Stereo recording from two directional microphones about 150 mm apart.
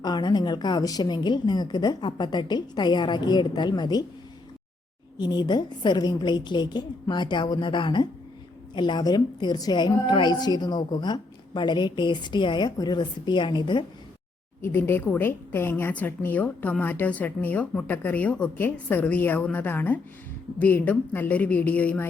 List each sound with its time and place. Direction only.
0.0 s a woman's voice: 30° left (ahead or behind)
5.1 s a woman's voice: 30° left (ahead or behind)
14.6 s a woman's voice: 15° left (ahead or behind)